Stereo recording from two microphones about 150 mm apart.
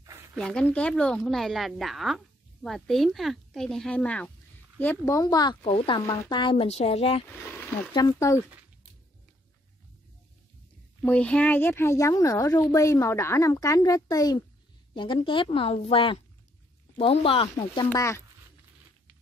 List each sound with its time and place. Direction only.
0.0 s a sound: 20° right (ahead or behind)
0.4 s a woman's voice: 5° left (ahead or behind); by 7.2 s 40° left (ahead or behind)
7.9 s speech: 25° left (ahead or behind)
11.0 s speech: 10° left (ahead or behind); by 17.8 s 40° left (ahead or behind)
17.9 s speech: 20° left (ahead or behind)